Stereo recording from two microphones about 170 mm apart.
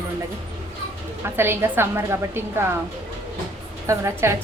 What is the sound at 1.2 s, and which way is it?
A woman's voice, 15° right (ahead or behind).